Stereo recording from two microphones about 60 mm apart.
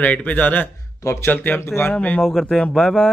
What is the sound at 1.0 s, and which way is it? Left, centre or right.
Speech, left.